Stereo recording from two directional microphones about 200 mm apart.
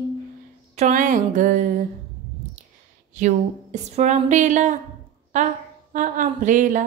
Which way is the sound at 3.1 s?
35° right (ahead or behind).